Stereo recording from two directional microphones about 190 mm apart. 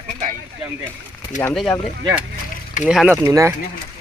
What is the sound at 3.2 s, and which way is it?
Speech, 15° right (ahead or behind).